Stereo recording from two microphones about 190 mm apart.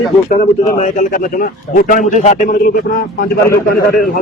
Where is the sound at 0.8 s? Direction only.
45° left (ahead or behind).